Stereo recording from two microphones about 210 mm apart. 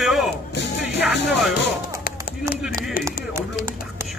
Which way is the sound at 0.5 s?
55° left (ahead or behind).